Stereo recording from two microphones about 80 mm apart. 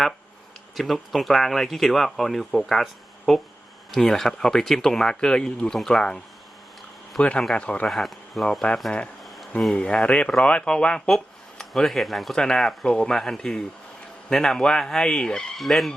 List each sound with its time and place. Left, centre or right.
0.8 s speech: centre
7.2 s speech: centre
7.9 s speech: centre
9.6 s speech: centre